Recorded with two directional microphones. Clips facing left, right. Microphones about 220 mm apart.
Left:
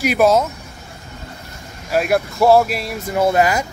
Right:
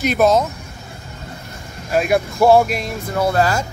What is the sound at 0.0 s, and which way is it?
Speech, 10° left (ahead or behind).